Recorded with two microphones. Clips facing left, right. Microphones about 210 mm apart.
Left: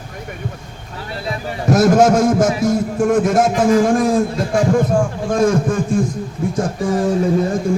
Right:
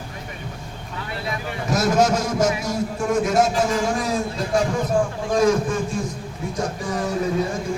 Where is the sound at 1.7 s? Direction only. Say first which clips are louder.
Left 7 dB; 50° left (ahead or behind).